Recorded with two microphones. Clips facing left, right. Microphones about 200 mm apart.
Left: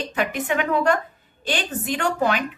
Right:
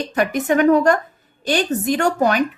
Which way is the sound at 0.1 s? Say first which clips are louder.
Right 7 dB; 40° right (ahead or behind).